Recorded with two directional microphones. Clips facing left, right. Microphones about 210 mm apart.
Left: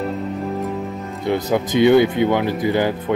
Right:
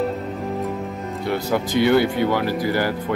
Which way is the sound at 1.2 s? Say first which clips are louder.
Left 3 dB; 20° left (ahead or behind).